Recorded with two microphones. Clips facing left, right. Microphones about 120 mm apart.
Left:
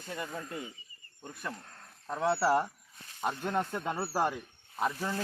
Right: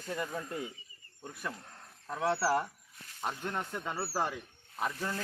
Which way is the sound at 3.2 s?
15° left (ahead or behind).